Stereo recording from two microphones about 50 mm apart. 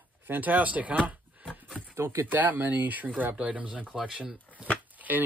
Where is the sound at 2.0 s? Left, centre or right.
Right.